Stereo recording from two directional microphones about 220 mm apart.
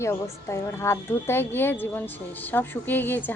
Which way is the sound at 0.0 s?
10° left (ahead or behind).